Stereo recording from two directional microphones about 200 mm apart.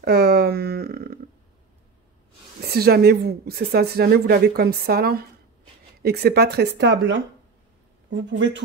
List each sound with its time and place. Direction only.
0.0 s speech: 50° right (ahead or behind)
2.6 s speech: 50° right (ahead or behind)